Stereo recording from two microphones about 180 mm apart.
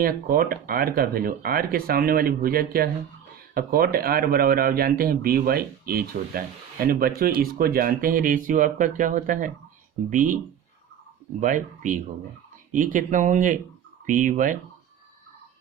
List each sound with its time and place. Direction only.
0.0 s speech: 55° right (ahead or behind)
11.3 s speech: 45° right (ahead or behind)